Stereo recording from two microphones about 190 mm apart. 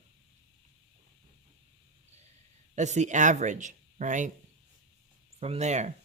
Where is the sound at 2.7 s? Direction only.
40° right (ahead or behind).